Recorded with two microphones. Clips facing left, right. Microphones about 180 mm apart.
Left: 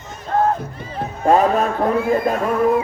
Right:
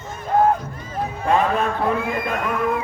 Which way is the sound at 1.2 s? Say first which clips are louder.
Left 5 dB; 40° left (ahead or behind).